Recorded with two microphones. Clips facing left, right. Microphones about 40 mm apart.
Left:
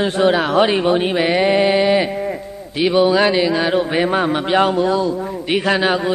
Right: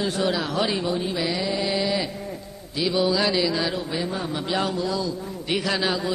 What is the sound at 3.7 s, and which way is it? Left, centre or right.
A man's voice, left.